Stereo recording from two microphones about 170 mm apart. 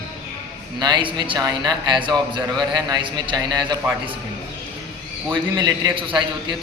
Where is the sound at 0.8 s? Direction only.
25° right (ahead or behind).